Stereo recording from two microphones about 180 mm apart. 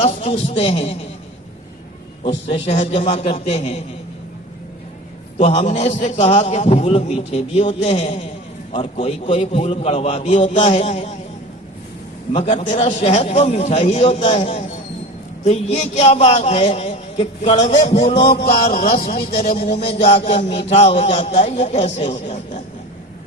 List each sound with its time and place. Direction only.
0.0 s a man's voice: 35° left (ahead or behind)
2.2 s a man's voice: 30° left (ahead or behind)
5.4 s a man's voice: 35° left (ahead or behind)
12.3 s a man's voice: 35° left (ahead or behind)
18.3 s a man's voice: 60° left (ahead or behind)
19.9 s a man's voice: 35° left (ahead or behind)